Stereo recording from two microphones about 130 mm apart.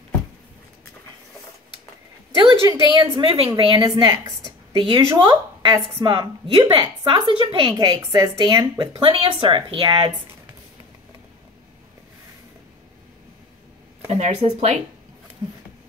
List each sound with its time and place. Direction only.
2.6 s a woman's voice: 25° right (ahead or behind)
3.0 s a woman's voice: 45° right (ahead or behind)
7.6 s a woman's voice: 30° right (ahead or behind)
9.0 s a woman's voice: 45° right (ahead or behind)
14.0 s speech: 55° right (ahead or behind)